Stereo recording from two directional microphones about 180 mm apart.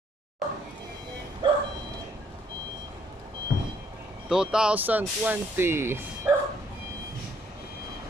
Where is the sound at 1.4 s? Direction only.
25° right (ahead or behind).